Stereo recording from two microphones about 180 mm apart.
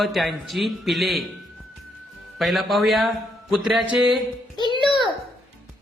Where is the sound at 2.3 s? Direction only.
Centre (ahead or behind).